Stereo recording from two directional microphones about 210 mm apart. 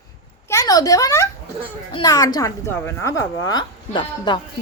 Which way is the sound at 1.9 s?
20° left (ahead or behind).